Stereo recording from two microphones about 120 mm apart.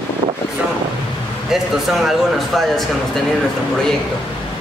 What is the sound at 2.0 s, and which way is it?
Speech, centre (ahead or behind).